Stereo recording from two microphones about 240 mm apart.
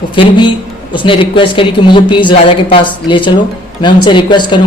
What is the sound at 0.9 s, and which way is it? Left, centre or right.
Speech, left.